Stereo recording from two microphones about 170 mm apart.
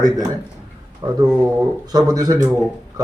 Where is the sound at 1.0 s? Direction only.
25° right (ahead or behind).